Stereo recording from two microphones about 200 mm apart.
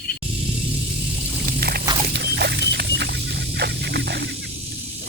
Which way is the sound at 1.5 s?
50° right (ahead or behind).